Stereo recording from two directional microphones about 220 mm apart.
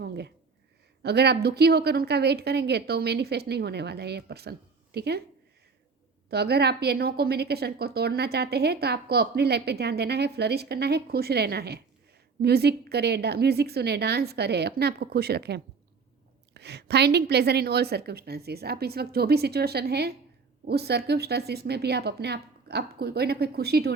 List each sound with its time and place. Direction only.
0.0 s a sound: 50° right (ahead or behind)
1.0 s a woman's voice: 45° right (ahead or behind)
6.3 s a woman's voice: 45° right (ahead or behind)